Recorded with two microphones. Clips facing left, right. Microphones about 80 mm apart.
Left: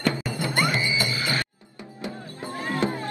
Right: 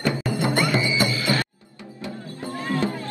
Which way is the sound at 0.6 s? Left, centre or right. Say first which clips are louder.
Right 1 dB; left.